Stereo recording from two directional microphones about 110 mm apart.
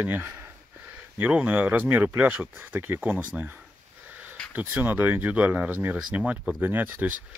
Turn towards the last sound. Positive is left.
turn(degrees=-15)  # may be behind; listen again after turning